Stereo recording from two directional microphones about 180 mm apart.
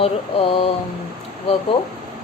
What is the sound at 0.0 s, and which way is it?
Speech, 30° left (ahead or behind).